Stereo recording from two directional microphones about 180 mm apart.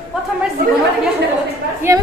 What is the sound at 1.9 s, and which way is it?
Speech, 15° right (ahead or behind).